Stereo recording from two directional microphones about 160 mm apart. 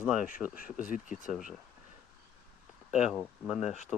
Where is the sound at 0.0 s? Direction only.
5° right (ahead or behind).